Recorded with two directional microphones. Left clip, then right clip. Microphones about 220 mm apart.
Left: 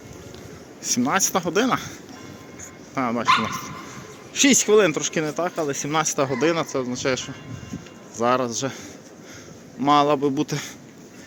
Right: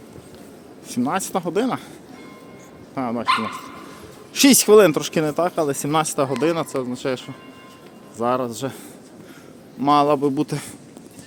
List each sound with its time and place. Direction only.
0.9 s speech: 5° right (ahead or behind)
2.9 s speech: 5° right (ahead or behind)
4.4 s speech: 30° right (ahead or behind); by 8.8 s 10° right (ahead or behind)
9.8 s speech: 10° right (ahead or behind)